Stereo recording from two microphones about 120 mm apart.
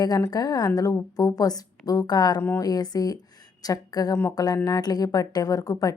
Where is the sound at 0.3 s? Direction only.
35° left (ahead or behind).